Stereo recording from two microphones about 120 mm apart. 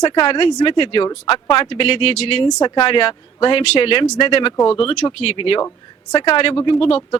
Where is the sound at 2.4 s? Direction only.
40° left (ahead or behind).